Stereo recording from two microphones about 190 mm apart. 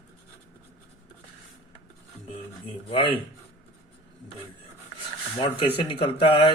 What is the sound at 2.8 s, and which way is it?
Speech, 30° left (ahead or behind).